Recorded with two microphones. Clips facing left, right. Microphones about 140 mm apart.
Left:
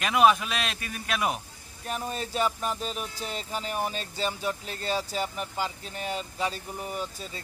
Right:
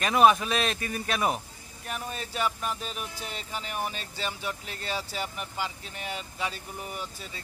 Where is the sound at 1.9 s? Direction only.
30° left (ahead or behind).